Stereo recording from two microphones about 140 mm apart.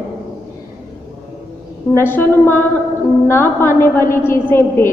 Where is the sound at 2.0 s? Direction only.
15° left (ahead or behind).